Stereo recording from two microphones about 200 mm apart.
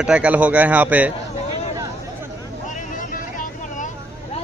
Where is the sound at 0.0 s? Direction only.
5° right (ahead or behind).